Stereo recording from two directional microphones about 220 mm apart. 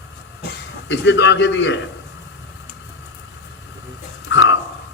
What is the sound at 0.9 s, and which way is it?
Speech, 55° left (ahead or behind).